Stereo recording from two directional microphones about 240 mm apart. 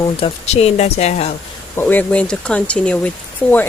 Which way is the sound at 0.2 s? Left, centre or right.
Left.